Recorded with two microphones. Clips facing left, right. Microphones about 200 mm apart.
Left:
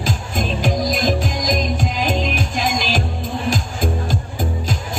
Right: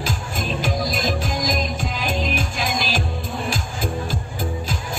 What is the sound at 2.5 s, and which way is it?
Music, 45° left (ahead or behind).